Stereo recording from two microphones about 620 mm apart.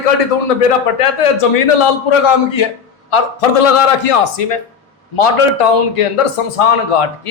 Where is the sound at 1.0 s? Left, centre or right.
Left.